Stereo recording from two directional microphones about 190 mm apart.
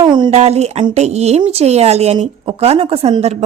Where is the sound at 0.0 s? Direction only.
25° right (ahead or behind).